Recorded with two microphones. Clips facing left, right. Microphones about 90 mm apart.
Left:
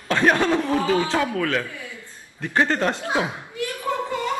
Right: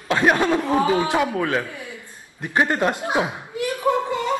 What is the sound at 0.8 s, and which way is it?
A man's voice, 20° right (ahead or behind).